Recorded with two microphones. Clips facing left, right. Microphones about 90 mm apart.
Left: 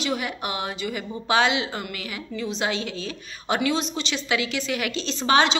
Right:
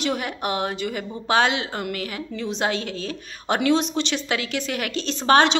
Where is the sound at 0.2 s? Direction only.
45° right (ahead or behind).